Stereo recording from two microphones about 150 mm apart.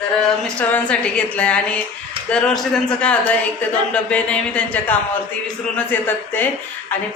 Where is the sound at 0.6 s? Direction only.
10° left (ahead or behind).